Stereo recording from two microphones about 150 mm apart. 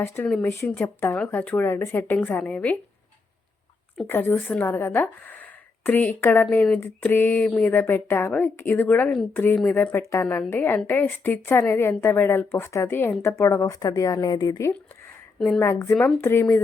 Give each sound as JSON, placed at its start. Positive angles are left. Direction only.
{"t": 0.4, "sound": "a woman's voice", "side_deg": 15}
{"t": 4.0, "sound": "a woman's voice", "side_deg": 15}
{"t": 15.4, "sound": "a woman's voice", "side_deg": 0}
{"t": 15.6, "sound": "a woman's voice", "side_deg": 20}